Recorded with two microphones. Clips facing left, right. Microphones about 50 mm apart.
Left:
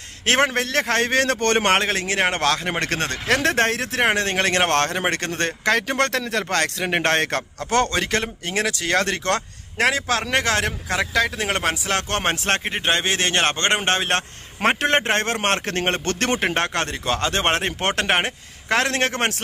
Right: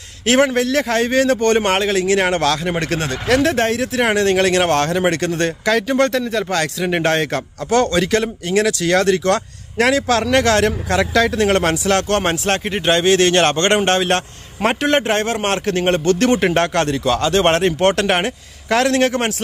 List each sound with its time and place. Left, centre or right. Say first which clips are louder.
0.2 s a man's voice: right 5 dB; left
2.1 s a man's voice: right 4 dB; left
2.8 s a man's voice: right 3 dB; left
4.0 s a man's voice: right 5 dB; left
4.6 s a man's voice: right 4 dB; left
6.5 s a man's voice: right 1 dB; left
9.8 s speech: right 5 dB; left
12.7 s a man's voice: right 7 dB; left
16.5 s speech: right 6 dB; left